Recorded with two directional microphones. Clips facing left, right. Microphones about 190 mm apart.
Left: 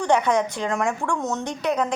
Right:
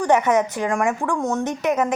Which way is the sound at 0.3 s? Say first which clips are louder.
Right 3 dB; 5° right (ahead or behind).